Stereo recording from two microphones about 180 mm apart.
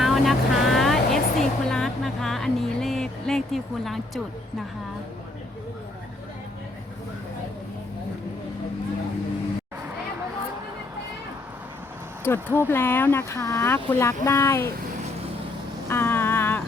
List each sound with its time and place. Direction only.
0.0 s vehicle: centre (ahead or behind)
12.2 s speech: 10° left (ahead or behind)
15.9 s a sound: 15° left (ahead or behind)